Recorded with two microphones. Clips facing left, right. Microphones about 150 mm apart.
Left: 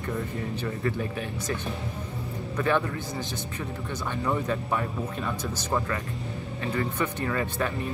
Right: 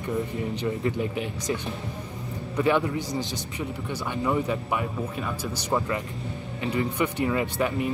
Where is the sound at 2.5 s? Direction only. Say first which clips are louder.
Right 3 dB; 15° right (ahead or behind).